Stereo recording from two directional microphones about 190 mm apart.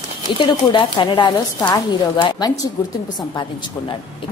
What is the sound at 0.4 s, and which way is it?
A woman's voice, 25° left (ahead or behind).